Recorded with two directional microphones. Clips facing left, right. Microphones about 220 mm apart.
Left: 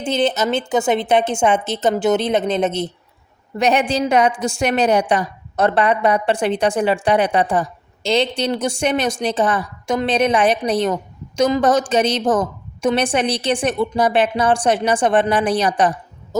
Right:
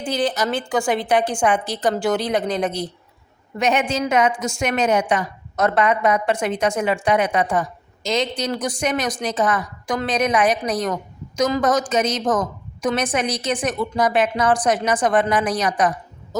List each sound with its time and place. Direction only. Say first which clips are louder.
0.0 s a woman's voice: left 3 dB; 25° left (ahead or behind)
3.6 s a woman's voice: left 3 dB; 35° left (ahead or behind)